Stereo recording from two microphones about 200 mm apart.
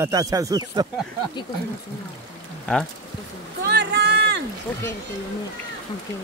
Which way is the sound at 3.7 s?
55° right (ahead or behind).